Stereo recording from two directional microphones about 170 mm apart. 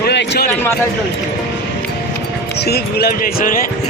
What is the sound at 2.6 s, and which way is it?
Speech, 70° left (ahead or behind).